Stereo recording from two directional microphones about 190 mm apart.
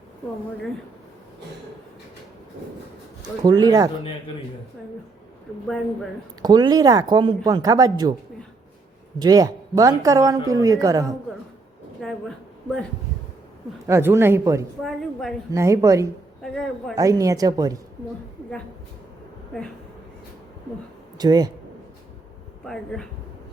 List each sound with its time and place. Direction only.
3.4 s speech: 20° right (ahead or behind)
5.6 s a woman's voice: 5° left (ahead or behind)
6.4 s speech: 20° right (ahead or behind)
9.1 s speech: 20° right (ahead or behind)
12.0 s a woman's voice: 5° left (ahead or behind)
13.8 s speech: 15° right (ahead or behind)
14.8 s a woman's voice: centre (ahead or behind)
15.5 s speech: 15° right (ahead or behind)
16.4 s a woman's voice: centre (ahead or behind)
16.9 s speech: 15° right (ahead or behind)
21.2 s speech: 20° right (ahead or behind)
22.6 s a woman's voice: 5° left (ahead or behind)